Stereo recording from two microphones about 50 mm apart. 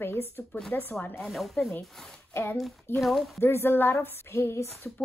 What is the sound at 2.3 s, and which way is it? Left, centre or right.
Speech, left.